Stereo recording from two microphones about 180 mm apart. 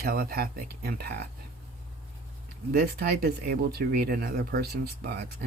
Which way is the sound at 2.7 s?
60° right (ahead or behind).